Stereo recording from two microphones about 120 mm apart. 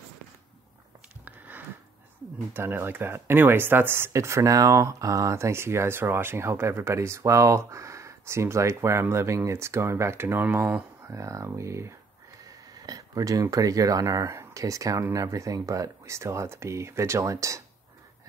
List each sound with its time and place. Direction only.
2.5 s speech: 20° right (ahead or behind)
11.1 s speech: 25° right (ahead or behind)